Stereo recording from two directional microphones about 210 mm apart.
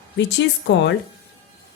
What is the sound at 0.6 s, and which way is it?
Speech, 55° left (ahead or behind).